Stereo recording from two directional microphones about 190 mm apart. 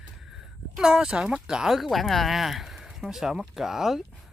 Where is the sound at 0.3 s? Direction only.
Centre (ahead or behind).